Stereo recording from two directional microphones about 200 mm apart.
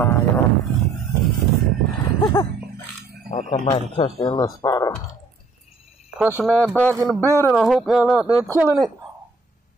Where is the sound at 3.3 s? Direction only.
35° left (ahead or behind); by 4.9 s 15° left (ahead or behind).